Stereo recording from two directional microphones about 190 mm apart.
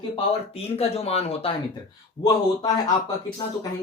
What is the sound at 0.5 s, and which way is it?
Speech, 30° left (ahead or behind).